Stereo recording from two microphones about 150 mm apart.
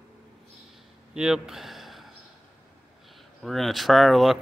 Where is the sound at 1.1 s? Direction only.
5° right (ahead or behind).